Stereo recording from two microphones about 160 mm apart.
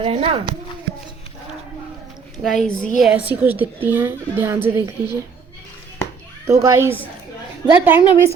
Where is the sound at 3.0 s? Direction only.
5° right (ahead or behind).